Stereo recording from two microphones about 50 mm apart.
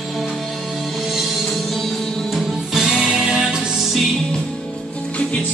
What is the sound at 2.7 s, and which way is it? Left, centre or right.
Music, centre.